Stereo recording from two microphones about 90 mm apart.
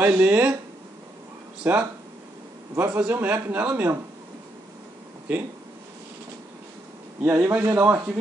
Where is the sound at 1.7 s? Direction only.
20° right (ahead or behind).